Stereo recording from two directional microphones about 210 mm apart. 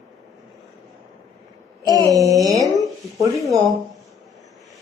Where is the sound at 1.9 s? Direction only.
15° right (ahead or behind).